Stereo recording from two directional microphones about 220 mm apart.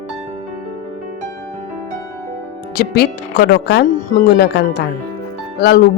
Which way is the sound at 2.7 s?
45° left (ahead or behind).